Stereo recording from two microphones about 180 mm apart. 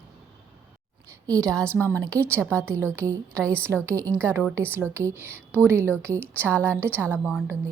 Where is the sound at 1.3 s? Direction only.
20° right (ahead or behind).